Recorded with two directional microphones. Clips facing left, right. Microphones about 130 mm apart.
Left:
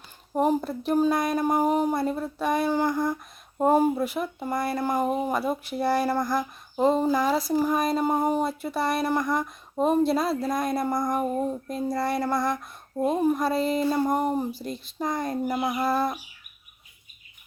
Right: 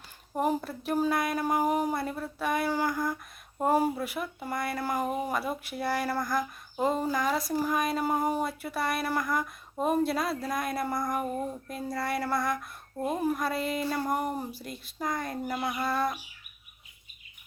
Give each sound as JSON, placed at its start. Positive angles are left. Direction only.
{"t": 0.3, "sound": "speech", "side_deg": 25}